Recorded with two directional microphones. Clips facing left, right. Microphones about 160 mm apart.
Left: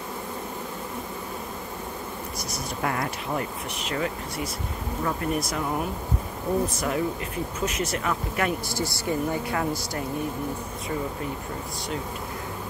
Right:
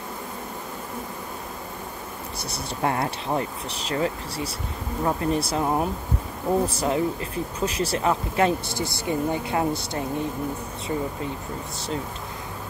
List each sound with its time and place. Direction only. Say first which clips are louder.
2.8 s speech: right 4 dB; 30° right (ahead or behind)